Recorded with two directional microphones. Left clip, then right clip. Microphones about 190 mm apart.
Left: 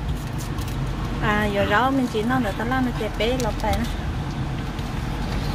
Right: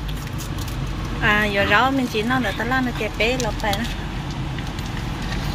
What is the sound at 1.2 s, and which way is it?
Speech, 10° left (ahead or behind).